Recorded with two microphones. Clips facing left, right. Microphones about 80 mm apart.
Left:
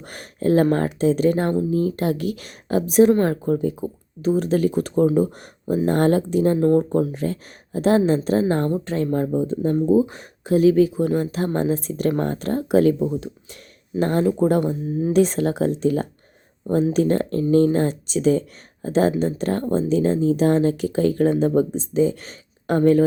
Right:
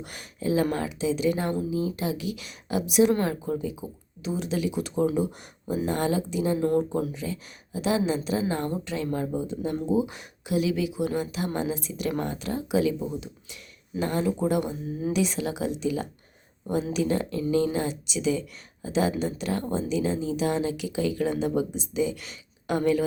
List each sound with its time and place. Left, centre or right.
0.0 s speech: left
6.7 s speech: left